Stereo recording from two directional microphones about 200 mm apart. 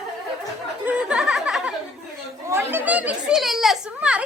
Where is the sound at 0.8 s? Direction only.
5° right (ahead or behind).